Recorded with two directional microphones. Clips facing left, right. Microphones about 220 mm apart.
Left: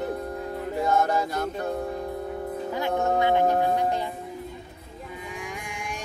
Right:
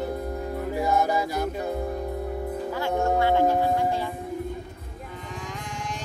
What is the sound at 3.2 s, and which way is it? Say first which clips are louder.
Music: even; 20° left (ahead or behind).